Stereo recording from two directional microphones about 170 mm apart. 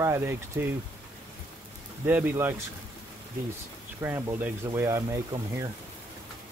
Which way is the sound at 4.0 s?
15° right (ahead or behind).